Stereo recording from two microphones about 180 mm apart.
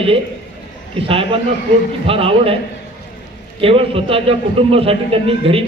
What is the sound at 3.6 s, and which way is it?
A man's voice, 30° right (ahead or behind).